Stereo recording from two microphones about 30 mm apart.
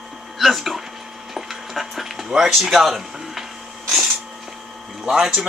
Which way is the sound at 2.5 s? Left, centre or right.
Centre.